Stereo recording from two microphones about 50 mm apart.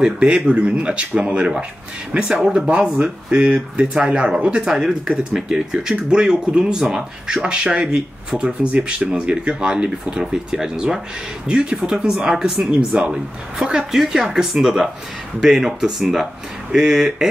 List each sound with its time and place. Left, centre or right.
0.0 s speech: centre
4.6 s speech: centre
12.9 s speech: right
13.6 s speech: centre